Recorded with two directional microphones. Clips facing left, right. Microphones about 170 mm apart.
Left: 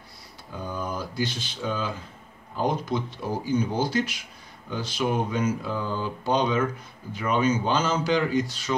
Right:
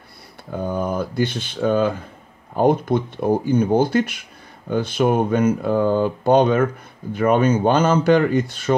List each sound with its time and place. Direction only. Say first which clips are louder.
0.5 s speech: right 9 dB; 55° right (ahead or behind)